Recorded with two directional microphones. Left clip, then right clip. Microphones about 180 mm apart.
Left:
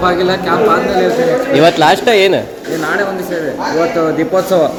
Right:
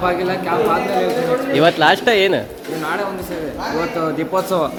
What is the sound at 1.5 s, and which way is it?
Speech, 5° right (ahead or behind).